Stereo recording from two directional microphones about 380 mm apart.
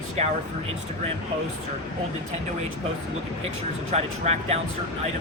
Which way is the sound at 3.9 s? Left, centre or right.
Centre.